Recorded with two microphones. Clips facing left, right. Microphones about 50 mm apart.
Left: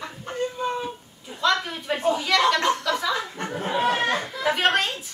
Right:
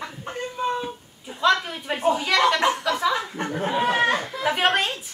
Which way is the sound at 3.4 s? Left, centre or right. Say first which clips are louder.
Even; centre.